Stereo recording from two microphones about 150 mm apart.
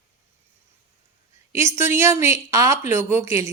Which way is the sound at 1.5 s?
15° right (ahead or behind).